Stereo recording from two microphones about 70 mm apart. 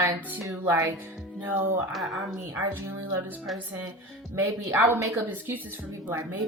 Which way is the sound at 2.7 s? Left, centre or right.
Right.